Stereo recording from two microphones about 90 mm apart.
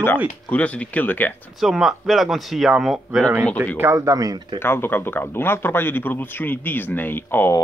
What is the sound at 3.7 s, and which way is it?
Speech, 30° right (ahead or behind).